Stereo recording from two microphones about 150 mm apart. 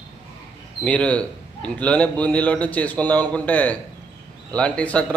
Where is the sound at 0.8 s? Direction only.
10° left (ahead or behind).